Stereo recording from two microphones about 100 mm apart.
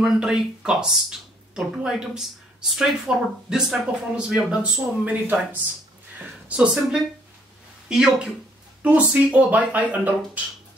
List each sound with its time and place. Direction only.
0.0 s speech: 5° right (ahead or behind)